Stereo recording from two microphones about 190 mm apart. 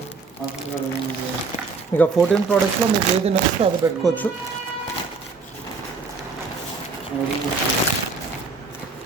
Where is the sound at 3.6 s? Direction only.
30° right (ahead or behind).